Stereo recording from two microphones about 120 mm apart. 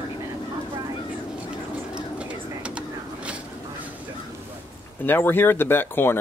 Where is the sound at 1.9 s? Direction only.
10° right (ahead or behind).